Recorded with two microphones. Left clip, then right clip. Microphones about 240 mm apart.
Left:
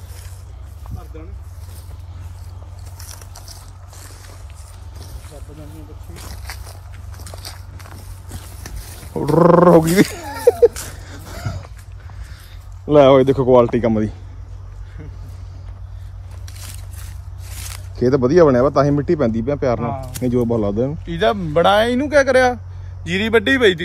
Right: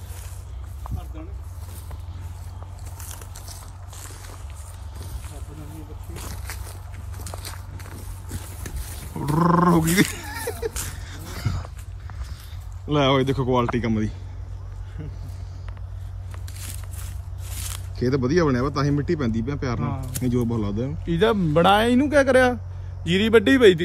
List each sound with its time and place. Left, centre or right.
4.0 s boat: centre
6.3 s walk: centre
8.3 s a sound: centre
9.2 s dog: centre
12.9 s speech: centre
15.0 s vehicle: centre
16.4 s biting: centre
17.6 s speech: centre